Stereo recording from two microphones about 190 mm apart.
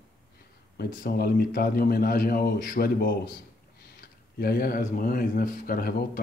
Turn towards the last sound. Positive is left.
turn(degrees=50)  # may be behind; listen again after turning